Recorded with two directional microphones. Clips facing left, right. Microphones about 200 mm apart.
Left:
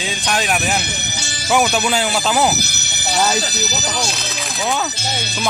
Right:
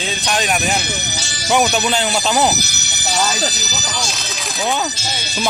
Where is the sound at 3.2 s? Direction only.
60° left (ahead or behind).